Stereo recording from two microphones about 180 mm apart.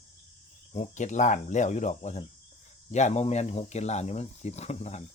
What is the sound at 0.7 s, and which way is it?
Speech, 40° left (ahead or behind).